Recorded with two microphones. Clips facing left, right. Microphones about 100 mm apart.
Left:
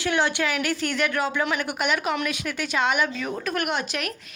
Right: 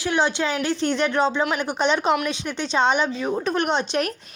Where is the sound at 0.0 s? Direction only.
20° right (ahead or behind).